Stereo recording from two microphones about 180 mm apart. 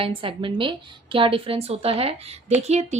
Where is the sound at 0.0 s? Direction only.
30° right (ahead or behind).